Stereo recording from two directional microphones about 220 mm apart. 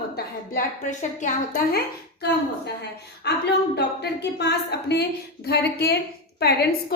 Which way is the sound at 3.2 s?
50° left (ahead or behind).